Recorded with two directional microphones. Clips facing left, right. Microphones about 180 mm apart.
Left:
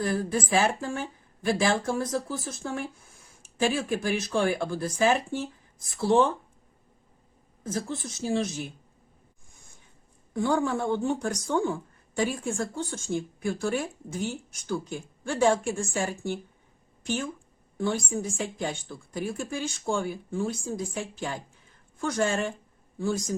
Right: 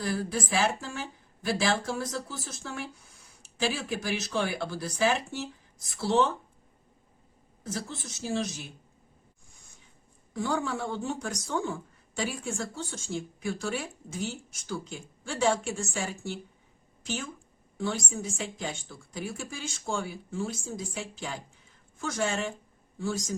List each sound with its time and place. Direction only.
0.0 s speech: 50° left (ahead or behind)
7.6 s speech: 50° left (ahead or behind)
10.3 s speech: 50° left (ahead or behind)
17.7 s speech: 55° left (ahead or behind)